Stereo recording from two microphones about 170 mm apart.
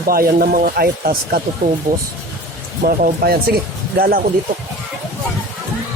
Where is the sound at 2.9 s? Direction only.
60° right (ahead or behind).